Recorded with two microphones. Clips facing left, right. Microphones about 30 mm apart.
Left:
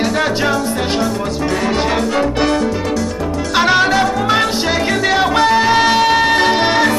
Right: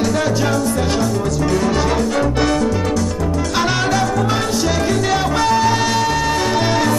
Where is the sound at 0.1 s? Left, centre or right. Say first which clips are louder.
Left 2 dB; left.